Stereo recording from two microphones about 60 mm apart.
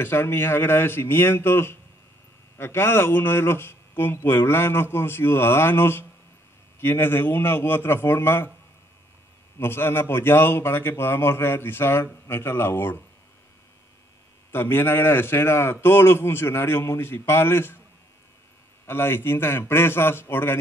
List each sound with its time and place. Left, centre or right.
0.0 s speech: left
9.6 s speech: left
14.5 s speech: left
18.9 s speech: left